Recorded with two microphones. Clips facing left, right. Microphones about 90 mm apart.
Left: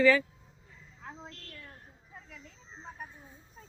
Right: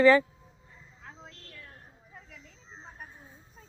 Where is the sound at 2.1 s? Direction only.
5° right (ahead or behind).